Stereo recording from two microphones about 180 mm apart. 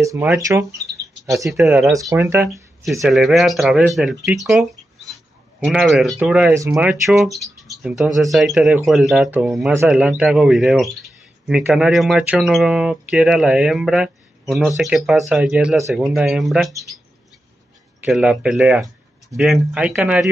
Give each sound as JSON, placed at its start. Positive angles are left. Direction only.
{"t": 0.0, "sound": "speech", "side_deg": -15}
{"t": 2.8, "sound": "speech", "side_deg": 0}
{"t": 18.0, "sound": "speech", "side_deg": -5}